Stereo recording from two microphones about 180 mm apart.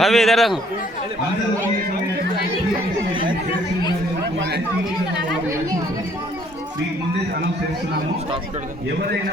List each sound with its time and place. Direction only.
0.0 s a man's voice: centre (ahead or behind)
3.1 s chatter: 25° right (ahead or behind)